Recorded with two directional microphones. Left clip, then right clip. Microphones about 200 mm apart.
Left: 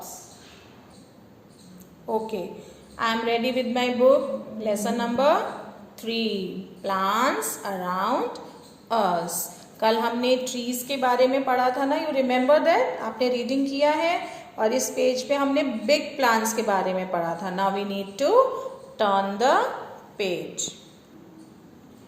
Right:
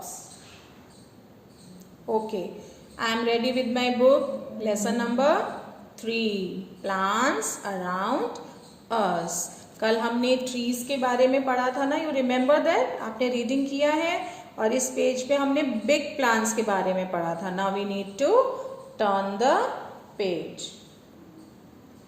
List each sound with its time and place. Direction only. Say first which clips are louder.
2.0 s a woman's voice: even; 30° right (ahead or behind)